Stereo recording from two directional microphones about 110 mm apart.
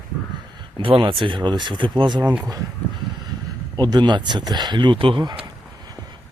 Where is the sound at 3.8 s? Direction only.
40° right (ahead or behind).